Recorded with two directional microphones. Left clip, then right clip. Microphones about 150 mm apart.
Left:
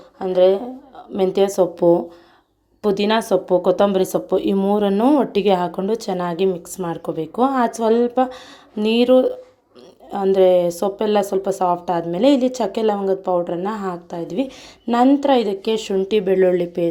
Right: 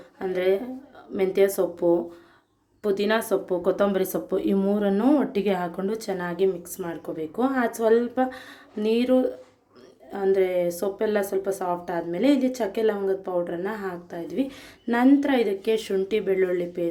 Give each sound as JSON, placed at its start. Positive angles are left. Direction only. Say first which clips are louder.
{"t": 0.2, "sound": "speech", "louder": "left 9 dB", "side_deg": 25}